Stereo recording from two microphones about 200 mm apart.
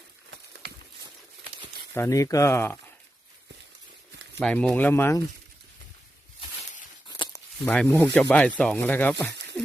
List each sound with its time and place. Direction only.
1.9 s speech: 15° left (ahead or behind)
4.4 s speech: 5° left (ahead or behind)
7.1 s speech: 15° left (ahead or behind)
9.3 s a sound: 60° right (ahead or behind)